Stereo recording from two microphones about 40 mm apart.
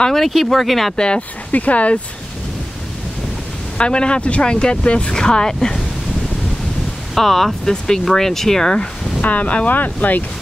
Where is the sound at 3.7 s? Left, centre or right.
Left.